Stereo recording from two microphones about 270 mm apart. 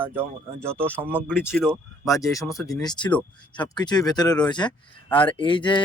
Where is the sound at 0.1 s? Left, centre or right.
Centre.